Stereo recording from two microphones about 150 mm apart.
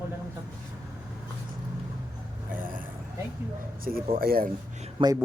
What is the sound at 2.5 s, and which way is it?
Speech, 65° right (ahead or behind).